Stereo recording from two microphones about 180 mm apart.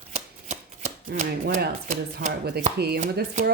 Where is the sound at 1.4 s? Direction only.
45° right (ahead or behind).